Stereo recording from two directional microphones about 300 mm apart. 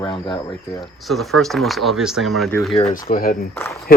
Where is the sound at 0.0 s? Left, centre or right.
Centre.